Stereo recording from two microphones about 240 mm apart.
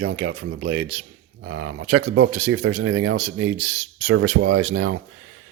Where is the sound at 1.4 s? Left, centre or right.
Right.